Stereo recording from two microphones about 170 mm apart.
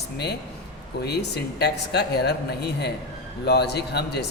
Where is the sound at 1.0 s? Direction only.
75° left (ahead or behind).